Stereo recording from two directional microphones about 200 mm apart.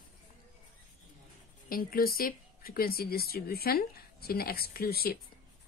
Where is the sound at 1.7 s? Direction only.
45° left (ahead or behind).